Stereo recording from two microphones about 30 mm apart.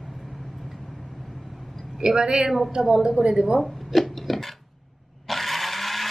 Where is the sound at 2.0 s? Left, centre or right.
Right.